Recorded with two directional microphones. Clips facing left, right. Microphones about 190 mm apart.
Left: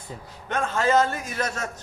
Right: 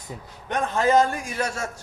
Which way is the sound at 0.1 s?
15° right (ahead or behind).